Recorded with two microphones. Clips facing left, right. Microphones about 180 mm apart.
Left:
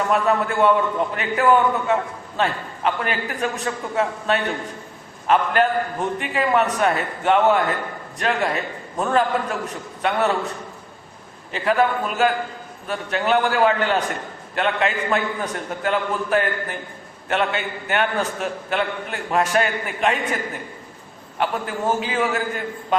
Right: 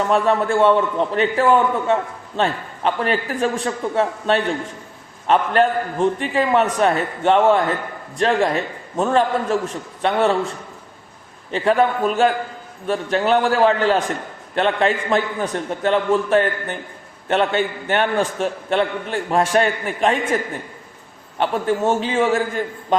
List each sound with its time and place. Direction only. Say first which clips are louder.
0.1 s a man's voice: right 4 dB; 30° right (ahead or behind)
11.5 s a man's voice: right 3 dB; 30° right (ahead or behind)
12.9 s a man's voice: right 3 dB; 30° right (ahead or behind)